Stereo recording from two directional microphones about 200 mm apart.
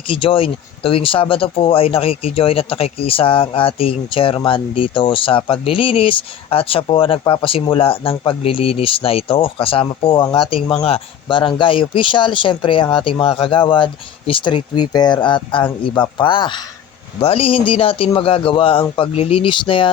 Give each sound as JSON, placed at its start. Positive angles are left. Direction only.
{"t": 0.1, "sound": "speech", "side_deg": 25}